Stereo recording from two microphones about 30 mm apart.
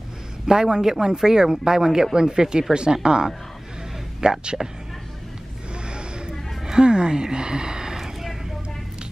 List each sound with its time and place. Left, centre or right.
0.5 s speech: right
5.9 s a sound: right
8.0 s vehicle: centre